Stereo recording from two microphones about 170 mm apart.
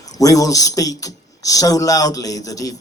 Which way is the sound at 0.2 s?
20° left (ahead or behind).